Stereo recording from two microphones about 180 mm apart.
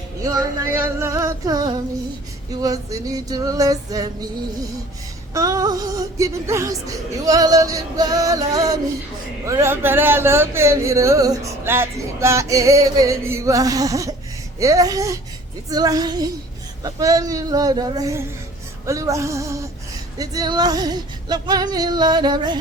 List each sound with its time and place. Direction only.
0.2 s speech: 20° right (ahead or behind)
3.2 s speech: 20° right (ahead or behind)
5.3 s speech: 20° right (ahead or behind)
9.5 s a sound: 15° right (ahead or behind)
15.7 s speech: 20° right (ahead or behind)
18.9 s a sound: 15° right (ahead or behind)
20.1 s speech: 20° right (ahead or behind)